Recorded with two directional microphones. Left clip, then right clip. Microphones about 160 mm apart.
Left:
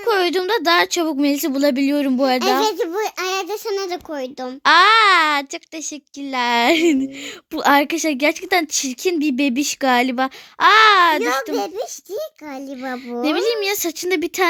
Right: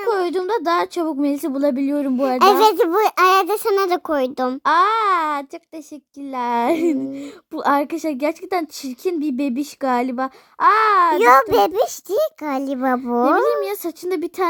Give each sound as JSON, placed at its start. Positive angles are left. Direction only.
{"t": 0.1, "sound": "a woman's voice", "side_deg": 0}
{"t": 2.4, "sound": "a child's voice", "side_deg": -75}
{"t": 4.6, "sound": "a woman's voice", "side_deg": 0}
{"t": 11.2, "sound": "a child's voice", "side_deg": -75}
{"t": 13.7, "sound": "a woman's voice", "side_deg": 0}